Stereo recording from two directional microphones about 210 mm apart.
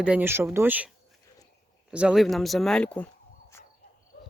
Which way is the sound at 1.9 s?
5° right (ahead or behind).